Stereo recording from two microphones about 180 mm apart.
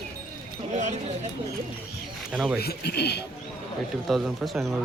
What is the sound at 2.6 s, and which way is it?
Speech, 65° left (ahead or behind).